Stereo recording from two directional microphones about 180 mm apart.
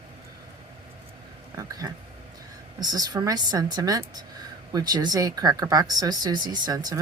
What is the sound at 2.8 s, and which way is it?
Speech, 20° right (ahead or behind).